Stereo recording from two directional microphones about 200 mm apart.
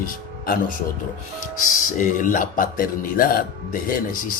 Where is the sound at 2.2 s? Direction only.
40° left (ahead or behind).